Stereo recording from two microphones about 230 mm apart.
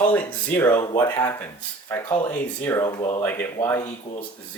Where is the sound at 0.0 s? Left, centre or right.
Centre.